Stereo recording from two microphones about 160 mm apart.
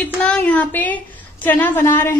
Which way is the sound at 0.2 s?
5° left (ahead or behind).